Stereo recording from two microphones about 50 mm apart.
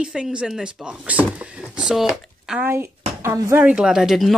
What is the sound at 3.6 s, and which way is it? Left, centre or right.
Speech, centre.